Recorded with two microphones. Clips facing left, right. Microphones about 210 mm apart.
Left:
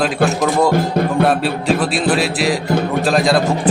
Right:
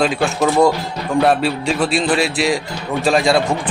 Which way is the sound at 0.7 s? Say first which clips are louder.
Left 5 dB; 50° left (ahead or behind).